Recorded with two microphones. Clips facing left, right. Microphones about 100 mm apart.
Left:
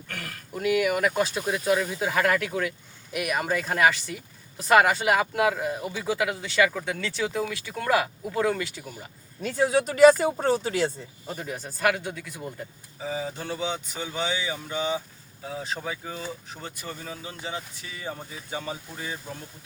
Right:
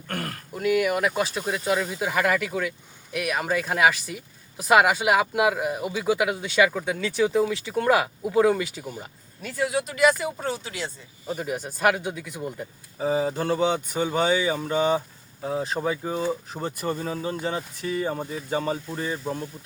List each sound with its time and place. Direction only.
0.1 s a sound: 45° right (ahead or behind)
0.5 s speech: centre (ahead or behind); by 9.0 s 20° right (ahead or behind)
9.4 s speech: 30° left (ahead or behind)
11.3 s speech: 10° right (ahead or behind)
13.0 s speech: 40° right (ahead or behind)